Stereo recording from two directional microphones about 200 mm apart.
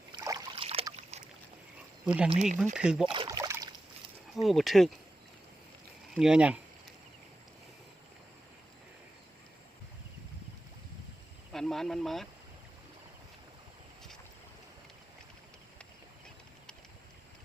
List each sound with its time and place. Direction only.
0.1 s boat: 20° right (ahead or behind)
0.5 s trickle: 30° right (ahead or behind)
1.1 s boat: 35° right (ahead or behind)
2.0 s speech: 5° right (ahead or behind)
3.1 s a sound: 20° right (ahead or behind)
4.4 s speech: centre (ahead or behind)
6.1 s speech: 5° right (ahead or behind)
11.5 s speech: centre (ahead or behind)